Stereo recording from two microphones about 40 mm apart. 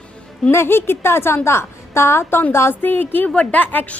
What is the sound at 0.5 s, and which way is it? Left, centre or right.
A woman's voice, left.